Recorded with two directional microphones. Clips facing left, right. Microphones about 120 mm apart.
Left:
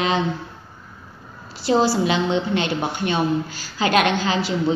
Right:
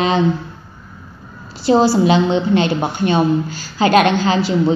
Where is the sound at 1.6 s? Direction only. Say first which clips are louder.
Right 5 dB; 30° right (ahead or behind).